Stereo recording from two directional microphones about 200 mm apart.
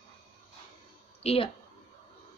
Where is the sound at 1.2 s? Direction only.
30° left (ahead or behind).